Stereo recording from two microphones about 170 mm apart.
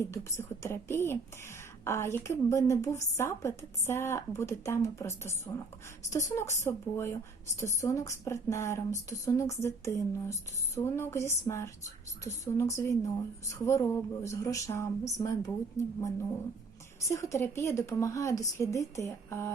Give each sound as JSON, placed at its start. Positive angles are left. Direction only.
{"t": 0.0, "sound": "a woman's voice", "side_deg": 15}